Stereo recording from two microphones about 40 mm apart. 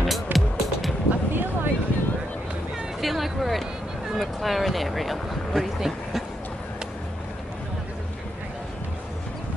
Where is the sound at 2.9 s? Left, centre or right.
Centre.